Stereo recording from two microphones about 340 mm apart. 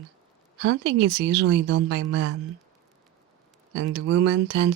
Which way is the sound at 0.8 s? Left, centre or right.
Right.